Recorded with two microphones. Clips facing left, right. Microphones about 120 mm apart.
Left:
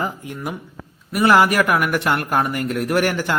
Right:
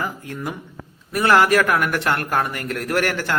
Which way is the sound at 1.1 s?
15° left (ahead or behind).